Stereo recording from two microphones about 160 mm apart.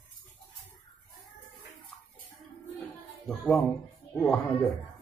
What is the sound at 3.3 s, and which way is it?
Music, centre (ahead or behind).